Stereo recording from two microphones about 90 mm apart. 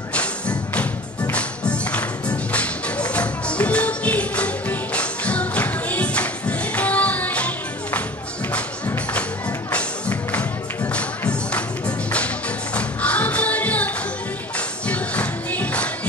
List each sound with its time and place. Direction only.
0.1 s music: 15° left (ahead or behind)
9.7 s music: 15° left (ahead or behind)
12.7 s music: 15° left (ahead or behind)
14.9 s music: 15° left (ahead or behind)